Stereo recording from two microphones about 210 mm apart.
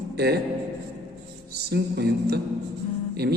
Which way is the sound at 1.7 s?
50° right (ahead or behind).